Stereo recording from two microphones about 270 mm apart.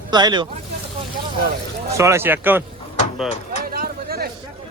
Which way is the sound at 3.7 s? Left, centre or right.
Right.